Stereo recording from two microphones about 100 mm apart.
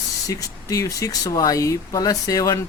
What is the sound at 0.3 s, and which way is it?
Speech, 35° left (ahead or behind).